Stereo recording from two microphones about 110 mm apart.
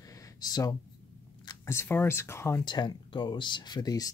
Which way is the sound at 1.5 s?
25° left (ahead or behind).